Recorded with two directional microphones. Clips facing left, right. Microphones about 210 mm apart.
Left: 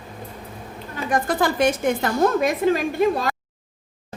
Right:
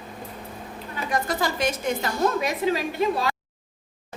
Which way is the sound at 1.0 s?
50° left (ahead or behind).